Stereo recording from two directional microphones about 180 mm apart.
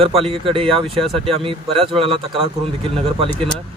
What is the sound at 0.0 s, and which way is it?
Speech, 30° right (ahead or behind).